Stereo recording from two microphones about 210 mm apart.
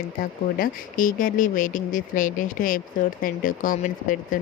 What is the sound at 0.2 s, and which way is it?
Speech, 40° left (ahead or behind).